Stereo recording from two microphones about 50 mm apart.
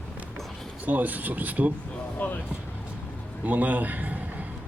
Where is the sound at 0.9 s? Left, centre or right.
Right.